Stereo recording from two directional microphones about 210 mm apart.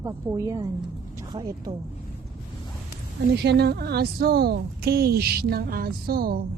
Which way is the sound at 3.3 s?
50° right (ahead or behind).